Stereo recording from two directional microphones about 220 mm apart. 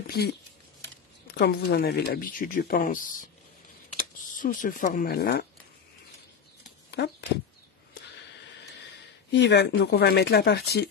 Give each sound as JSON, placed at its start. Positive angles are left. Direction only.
{"t": 0.0, "sound": "speech", "side_deg": 45}
{"t": 7.0, "sound": "speech", "side_deg": 50}
{"t": 9.3, "sound": "speech", "side_deg": 50}